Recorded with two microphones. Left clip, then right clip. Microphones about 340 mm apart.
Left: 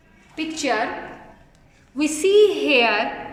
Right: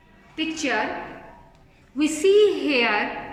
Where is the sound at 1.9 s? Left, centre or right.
Centre.